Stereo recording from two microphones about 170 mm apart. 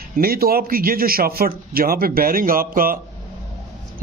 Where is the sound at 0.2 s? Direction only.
60° right (ahead or behind).